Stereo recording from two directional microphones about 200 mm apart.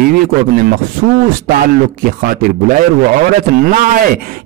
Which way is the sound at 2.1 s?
45° right (ahead or behind).